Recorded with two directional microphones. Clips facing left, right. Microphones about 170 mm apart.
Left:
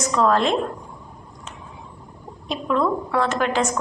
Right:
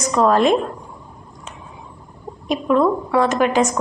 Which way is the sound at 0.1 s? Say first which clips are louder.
Right 4 dB; 15° right (ahead or behind).